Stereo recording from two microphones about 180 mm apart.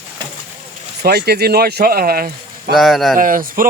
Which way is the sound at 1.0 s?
60° right (ahead or behind).